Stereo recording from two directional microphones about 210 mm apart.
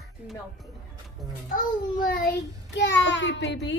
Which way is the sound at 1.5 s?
40° left (ahead or behind).